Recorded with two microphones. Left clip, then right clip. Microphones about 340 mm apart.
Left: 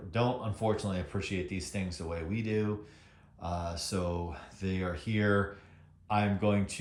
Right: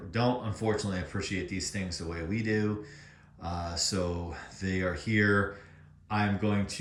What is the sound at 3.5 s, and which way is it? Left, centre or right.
Speech, left.